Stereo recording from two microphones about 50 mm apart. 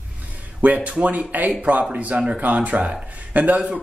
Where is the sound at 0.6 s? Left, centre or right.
Right.